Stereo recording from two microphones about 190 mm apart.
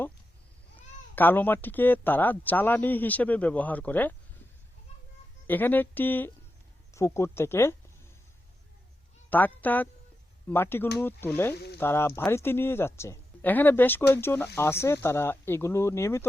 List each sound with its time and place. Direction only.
1.1 s speech: 10° left (ahead or behind)
5.5 s speech: 10° left (ahead or behind)
9.3 s speech: 10° left (ahead or behind)
11.5 s speech: 60° left (ahead or behind)
11.8 s speech: 15° left (ahead or behind)